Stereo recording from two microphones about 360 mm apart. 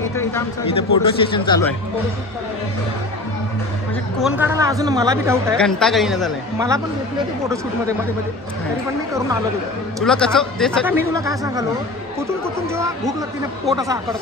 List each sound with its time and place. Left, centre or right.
0.3 s a man's voice: centre
4.2 s a woman's voice: centre
10.0 s a woman's voice: centre